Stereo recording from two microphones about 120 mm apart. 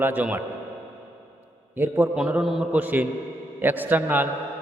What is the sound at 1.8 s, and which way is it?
Speech, 20° right (ahead or behind).